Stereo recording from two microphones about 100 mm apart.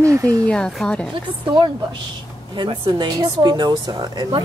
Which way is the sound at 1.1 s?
50° right (ahead or behind).